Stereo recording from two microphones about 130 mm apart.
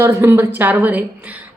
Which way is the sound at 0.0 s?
20° right (ahead or behind).